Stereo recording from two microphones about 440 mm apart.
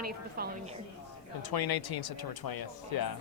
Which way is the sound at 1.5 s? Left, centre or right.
Left.